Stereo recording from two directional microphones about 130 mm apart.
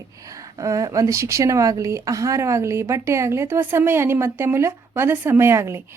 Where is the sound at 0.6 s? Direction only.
25° right (ahead or behind).